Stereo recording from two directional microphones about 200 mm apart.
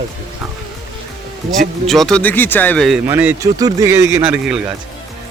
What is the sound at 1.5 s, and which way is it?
Speech, centre (ahead or behind).